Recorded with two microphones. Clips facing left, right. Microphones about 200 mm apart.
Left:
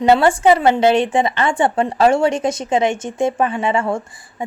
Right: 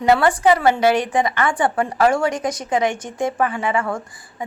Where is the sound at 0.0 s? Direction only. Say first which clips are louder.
Left 3 dB; 25° left (ahead or behind).